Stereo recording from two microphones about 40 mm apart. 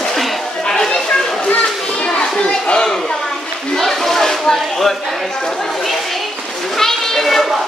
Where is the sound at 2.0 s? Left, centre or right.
Left.